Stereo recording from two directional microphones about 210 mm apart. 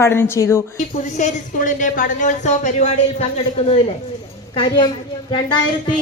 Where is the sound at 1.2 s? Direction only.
40° left (ahead or behind).